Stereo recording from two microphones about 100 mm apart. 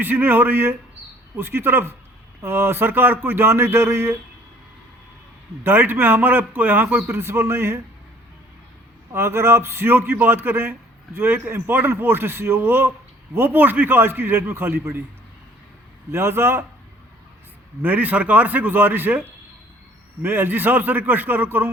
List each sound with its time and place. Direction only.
0.0 s a man's voice: 20° right (ahead or behind)
5.6 s a man's voice: 20° right (ahead or behind)
9.1 s a man's voice: 25° right (ahead or behind)
16.1 s a man's voice: 25° right (ahead or behind)
17.8 s a man's voice: 15° right (ahead or behind)
20.2 s a man's voice: 20° right (ahead or behind)